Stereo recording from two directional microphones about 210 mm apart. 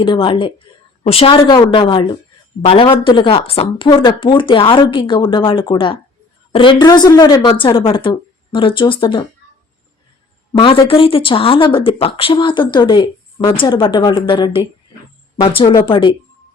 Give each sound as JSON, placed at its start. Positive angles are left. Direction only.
{"t": 0.0, "sound": "speech", "side_deg": 25}
{"t": 10.6, "sound": "speech", "side_deg": 25}